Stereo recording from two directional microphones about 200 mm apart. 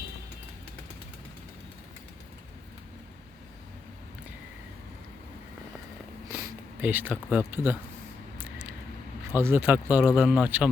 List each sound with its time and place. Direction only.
6.8 s speech: 10° right (ahead or behind)
9.3 s speech: 10° right (ahead or behind)